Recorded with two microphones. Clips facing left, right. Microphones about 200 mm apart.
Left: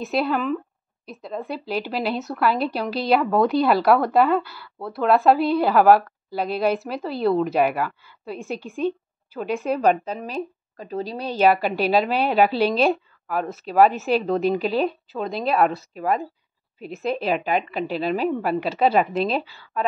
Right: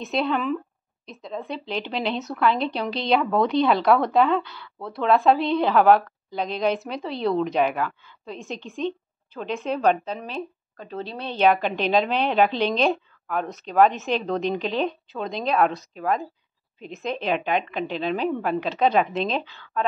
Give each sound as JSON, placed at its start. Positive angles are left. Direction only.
{"t": 0.0, "sound": "a woman's voice", "side_deg": 5}
{"t": 11.1, "sound": "a woman's voice", "side_deg": 35}
{"t": 11.3, "sound": "a woman's voice", "side_deg": 5}